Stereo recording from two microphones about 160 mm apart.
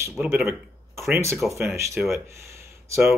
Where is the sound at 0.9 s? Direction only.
Centre (ahead or behind).